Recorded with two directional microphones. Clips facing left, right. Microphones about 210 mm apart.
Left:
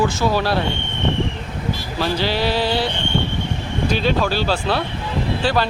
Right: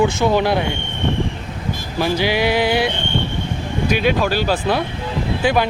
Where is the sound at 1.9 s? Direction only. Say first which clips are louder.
Right 3 dB; 15° right (ahead or behind).